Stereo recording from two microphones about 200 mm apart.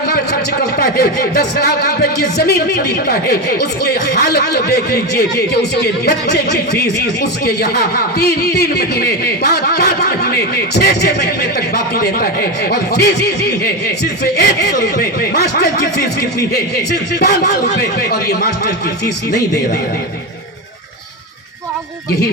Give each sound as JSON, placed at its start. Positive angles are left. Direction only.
{"t": 0.8, "sound": "speech", "side_deg": 50}